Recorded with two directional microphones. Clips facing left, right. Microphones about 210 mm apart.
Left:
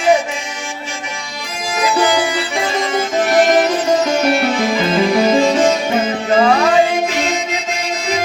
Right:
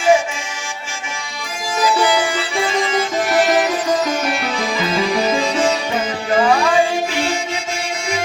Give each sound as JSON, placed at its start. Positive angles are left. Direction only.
{"t": 2.0, "sound": "music", "side_deg": 40}
{"t": 6.3, "sound": "music", "side_deg": 40}